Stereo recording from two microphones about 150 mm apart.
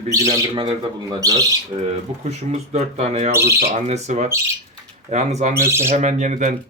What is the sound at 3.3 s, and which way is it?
Speech, 15° right (ahead or behind).